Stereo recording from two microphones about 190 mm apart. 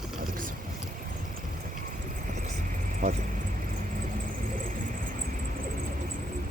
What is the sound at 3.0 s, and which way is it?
Speech, 35° right (ahead or behind).